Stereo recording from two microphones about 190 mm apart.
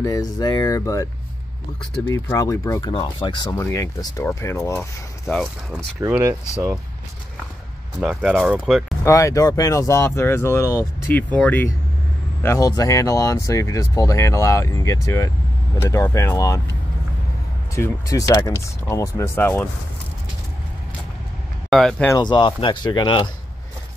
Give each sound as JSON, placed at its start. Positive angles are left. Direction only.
{"t": 0.0, "sound": "speech", "side_deg": 20}
{"t": 2.3, "sound": "speech", "side_deg": 20}
{"t": 5.3, "sound": "speech", "side_deg": -5}
{"t": 8.0, "sound": "speech", "side_deg": 0}
{"t": 9.0, "sound": "speech", "side_deg": 15}
{"t": 17.7, "sound": "speech", "side_deg": 15}
{"t": 21.6, "sound": "speech", "side_deg": 0}
{"t": 22.1, "sound": "speech", "side_deg": 25}